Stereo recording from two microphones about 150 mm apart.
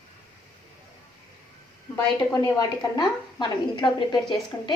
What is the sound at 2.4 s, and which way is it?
A woman's voice, 30° left (ahead or behind).